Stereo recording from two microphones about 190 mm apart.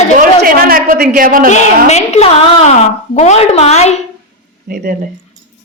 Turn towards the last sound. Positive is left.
turn(degrees=-50)  # may be behind; listen again after turning